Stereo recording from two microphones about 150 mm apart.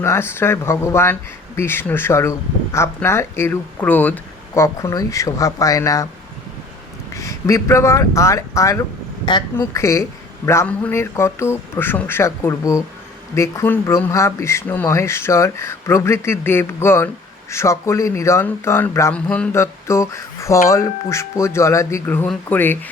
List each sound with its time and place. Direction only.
0.0 s speech: 15° left (ahead or behind)
7.1 s speech: 20° left (ahead or behind)
19.5 s speech: 20° left (ahead or behind)